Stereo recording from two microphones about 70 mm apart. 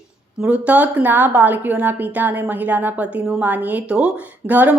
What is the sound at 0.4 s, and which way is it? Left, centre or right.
A woman's voice, right.